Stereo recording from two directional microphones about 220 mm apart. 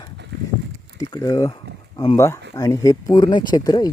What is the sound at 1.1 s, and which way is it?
Speech, 15° left (ahead or behind).